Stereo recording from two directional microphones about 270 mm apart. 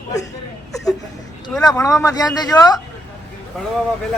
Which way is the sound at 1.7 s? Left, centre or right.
Centre.